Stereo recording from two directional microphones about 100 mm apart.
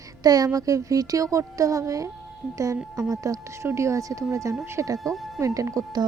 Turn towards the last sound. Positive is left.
turn(degrees=-35)  # may be behind; listen again after turning